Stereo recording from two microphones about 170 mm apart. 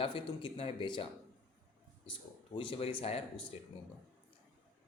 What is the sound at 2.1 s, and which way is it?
A man's voice, 30° left (ahead or behind).